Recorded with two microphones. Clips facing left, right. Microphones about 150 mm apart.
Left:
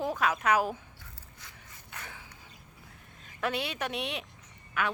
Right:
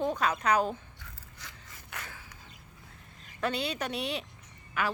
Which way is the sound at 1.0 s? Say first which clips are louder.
Right 2 dB; 90° right.